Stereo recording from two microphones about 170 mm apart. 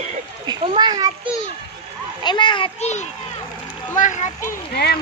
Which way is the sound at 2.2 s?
25° left (ahead or behind).